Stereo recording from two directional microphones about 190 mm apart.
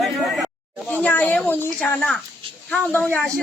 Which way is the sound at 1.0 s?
10° left (ahead or behind).